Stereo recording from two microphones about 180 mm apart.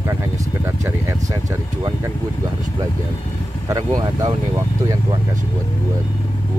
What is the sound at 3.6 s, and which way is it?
Speech, 20° right (ahead or behind).